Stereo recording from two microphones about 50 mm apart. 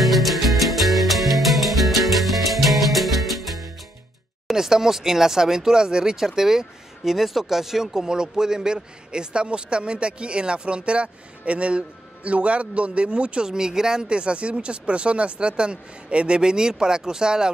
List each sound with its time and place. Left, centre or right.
0.0 s music: centre
4.5 s speech: centre